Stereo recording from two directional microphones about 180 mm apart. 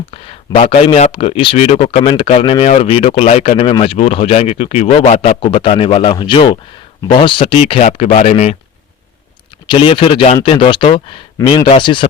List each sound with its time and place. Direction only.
0.9 s speech: 35° left (ahead or behind)
9.6 s speech: 30° left (ahead or behind)